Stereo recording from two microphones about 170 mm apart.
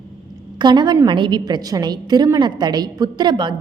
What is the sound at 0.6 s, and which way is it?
A woman's voice, 25° right (ahead or behind).